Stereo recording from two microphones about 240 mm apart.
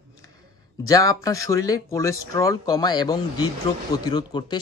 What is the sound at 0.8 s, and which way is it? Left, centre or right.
Speech, centre.